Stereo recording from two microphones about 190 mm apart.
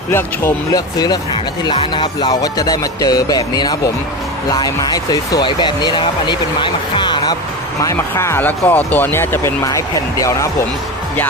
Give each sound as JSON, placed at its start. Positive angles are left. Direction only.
{"t": 0.1, "sound": "speech", "side_deg": 10}